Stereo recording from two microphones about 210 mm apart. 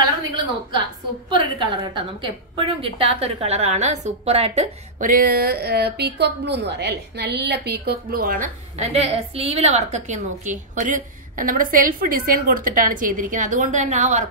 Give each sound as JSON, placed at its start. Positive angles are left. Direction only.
{"t": 1.3, "sound": "a woman's voice", "side_deg": -20}